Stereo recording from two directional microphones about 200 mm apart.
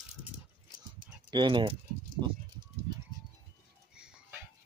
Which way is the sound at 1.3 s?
25° right (ahead or behind).